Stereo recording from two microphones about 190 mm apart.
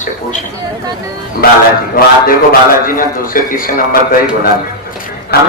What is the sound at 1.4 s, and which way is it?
Speech, 50° left (ahead or behind).